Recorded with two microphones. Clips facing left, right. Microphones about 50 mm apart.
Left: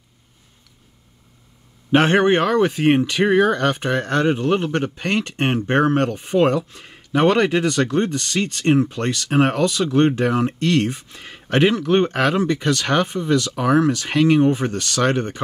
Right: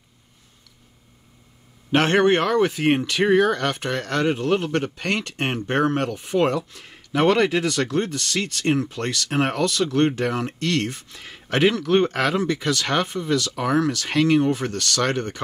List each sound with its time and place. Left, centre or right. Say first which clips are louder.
1.9 s speech: left 2 dB; centre